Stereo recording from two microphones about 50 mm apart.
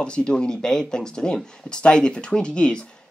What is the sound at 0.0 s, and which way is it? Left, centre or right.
Speech, centre.